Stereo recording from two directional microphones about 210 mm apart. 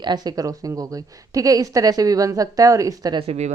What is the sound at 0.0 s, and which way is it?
A woman's voice, 20° right (ahead or behind).